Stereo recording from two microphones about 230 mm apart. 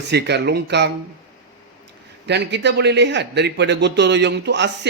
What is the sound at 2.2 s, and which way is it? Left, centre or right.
A man's voice, right.